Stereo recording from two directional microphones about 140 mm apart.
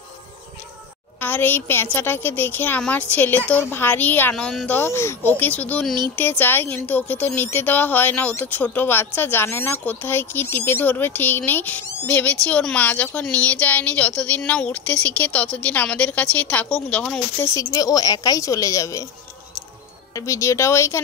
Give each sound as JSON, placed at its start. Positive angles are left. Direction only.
{"t": 1.2, "sound": "a woman's voice", "side_deg": 15}
{"t": 17.6, "sound": "a woman's voice", "side_deg": 25}
{"t": 20.2, "sound": "a woman's voice", "side_deg": 20}